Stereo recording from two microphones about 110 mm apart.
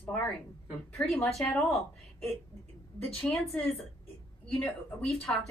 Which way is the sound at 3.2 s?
Centre (ahead or behind).